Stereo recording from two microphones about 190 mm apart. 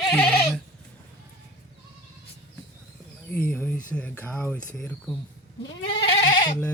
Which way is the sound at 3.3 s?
10° left (ahead or behind).